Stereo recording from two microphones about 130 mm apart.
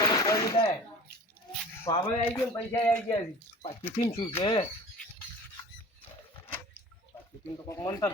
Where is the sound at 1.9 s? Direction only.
45° left (ahead or behind).